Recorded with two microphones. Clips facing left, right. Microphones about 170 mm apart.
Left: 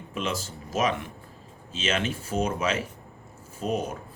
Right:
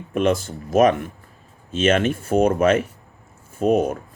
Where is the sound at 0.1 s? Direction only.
55° right (ahead or behind).